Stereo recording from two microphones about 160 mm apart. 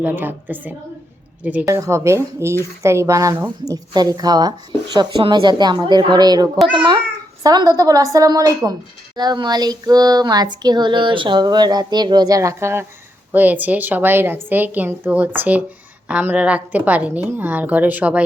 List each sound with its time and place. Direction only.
0.0 s a woman's voice: 10° right (ahead or behind)